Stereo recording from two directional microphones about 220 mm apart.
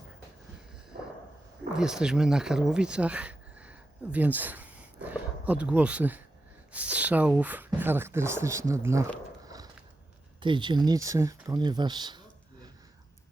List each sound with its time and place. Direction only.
1.8 s speech: 5° right (ahead or behind)
10.4 s speech: 20° right (ahead or behind)